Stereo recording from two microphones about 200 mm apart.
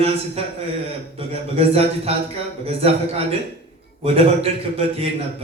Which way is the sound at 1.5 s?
30° right (ahead or behind).